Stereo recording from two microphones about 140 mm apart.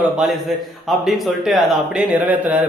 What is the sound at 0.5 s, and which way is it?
A man's voice, centre (ahead or behind).